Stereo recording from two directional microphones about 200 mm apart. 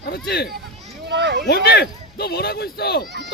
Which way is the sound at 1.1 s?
60° right (ahead or behind).